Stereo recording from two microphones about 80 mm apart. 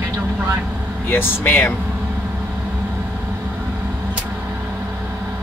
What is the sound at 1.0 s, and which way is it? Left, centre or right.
Speech, left.